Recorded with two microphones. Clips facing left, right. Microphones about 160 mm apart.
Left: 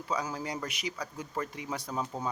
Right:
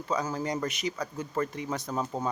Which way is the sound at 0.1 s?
10° left (ahead or behind).